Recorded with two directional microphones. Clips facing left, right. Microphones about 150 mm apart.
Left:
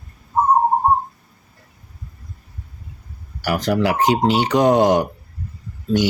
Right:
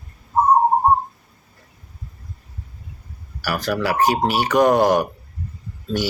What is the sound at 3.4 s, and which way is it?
Speech, 20° left (ahead or behind).